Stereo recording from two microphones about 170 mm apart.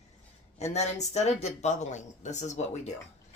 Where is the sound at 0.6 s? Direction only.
40° left (ahead or behind).